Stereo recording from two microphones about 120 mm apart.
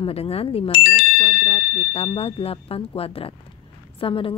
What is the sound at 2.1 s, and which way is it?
A woman's voice, 55° left (ahead or behind).